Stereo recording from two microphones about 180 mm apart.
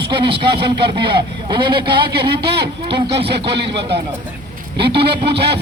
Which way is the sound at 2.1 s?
65° right (ahead or behind).